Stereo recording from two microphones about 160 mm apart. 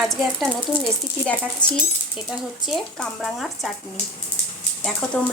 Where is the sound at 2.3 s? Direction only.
Centre (ahead or behind).